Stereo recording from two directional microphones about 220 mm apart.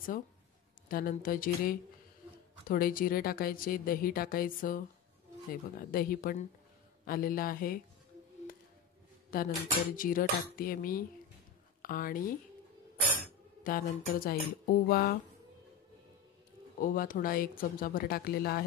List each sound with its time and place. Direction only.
0.8 s speech: 40° left (ahead or behind)
9.3 s speech: 40° left (ahead or behind)
13.7 s speech: 40° left (ahead or behind)
16.8 s speech: 40° left (ahead or behind)